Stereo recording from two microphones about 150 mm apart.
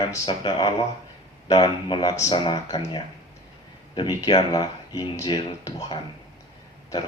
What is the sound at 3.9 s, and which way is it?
Speech, 30° left (ahead or behind).